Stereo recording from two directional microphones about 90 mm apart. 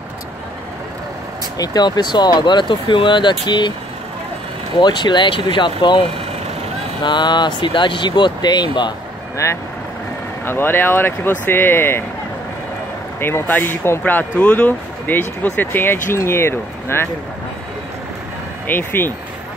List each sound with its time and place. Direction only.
1.6 s speech: 50° left (ahead or behind)
4.7 s speech: 60° left (ahead or behind)
10.4 s speech: 25° left (ahead or behind)
13.2 s speech: 25° left (ahead or behind)
18.7 s speech: 20° left (ahead or behind)